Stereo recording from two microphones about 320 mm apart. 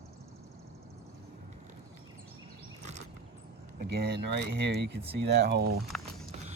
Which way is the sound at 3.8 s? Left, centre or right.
Right.